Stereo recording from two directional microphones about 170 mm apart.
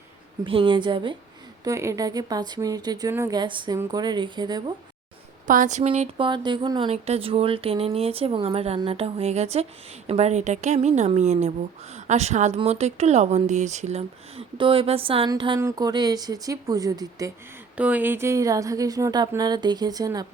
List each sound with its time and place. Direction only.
0.4 s a woman's voice: 30° right (ahead or behind)
1.6 s a woman's voice: 20° right (ahead or behind)
5.5 s a sound: 50° right (ahead or behind)
6.2 s a woman's voice: 25° right (ahead or behind)
17.7 s a woman's voice: 10° right (ahead or behind)